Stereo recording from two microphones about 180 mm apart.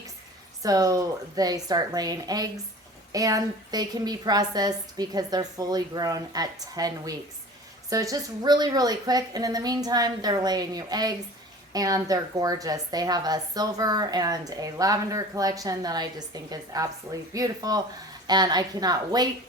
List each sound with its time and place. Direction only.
0.6 s a woman's voice: 20° right (ahead or behind)